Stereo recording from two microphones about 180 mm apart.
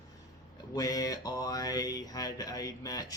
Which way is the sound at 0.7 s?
20° left (ahead or behind).